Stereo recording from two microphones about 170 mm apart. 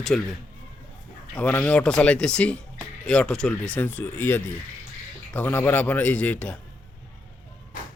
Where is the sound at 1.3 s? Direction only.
10° left (ahead or behind).